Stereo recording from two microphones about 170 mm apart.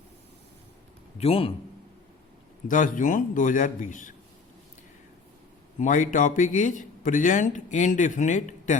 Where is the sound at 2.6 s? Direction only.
50° left (ahead or behind).